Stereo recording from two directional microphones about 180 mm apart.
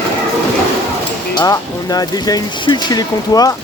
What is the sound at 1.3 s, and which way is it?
Speech, 20° left (ahead or behind).